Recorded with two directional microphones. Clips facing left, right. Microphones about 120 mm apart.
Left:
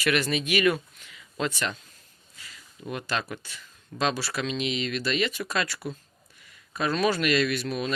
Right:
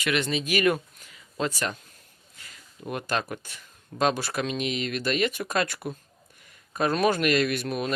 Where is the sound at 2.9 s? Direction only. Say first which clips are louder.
Right 2 dB; 45° right (ahead or behind).